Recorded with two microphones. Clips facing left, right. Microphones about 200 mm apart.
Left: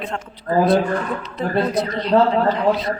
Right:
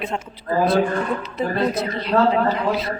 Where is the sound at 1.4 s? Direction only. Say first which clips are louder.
Left 2 dB; 5° right (ahead or behind).